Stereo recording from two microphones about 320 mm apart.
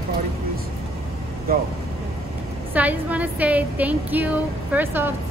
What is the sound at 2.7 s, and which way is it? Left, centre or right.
A woman's voice, centre.